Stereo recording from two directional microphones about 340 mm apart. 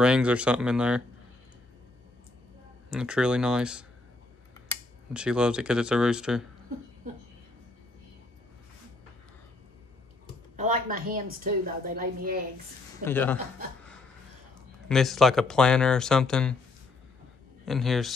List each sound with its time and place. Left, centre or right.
0.0 s speech: centre
2.9 s speech: centre
5.1 s speech: centre
10.5 s a woman's voice: right
13.0 s speech: centre
14.9 s speech: centre
17.6 s speech: centre